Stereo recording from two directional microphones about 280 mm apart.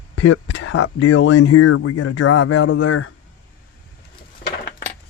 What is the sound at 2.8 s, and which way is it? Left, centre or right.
Speech, left.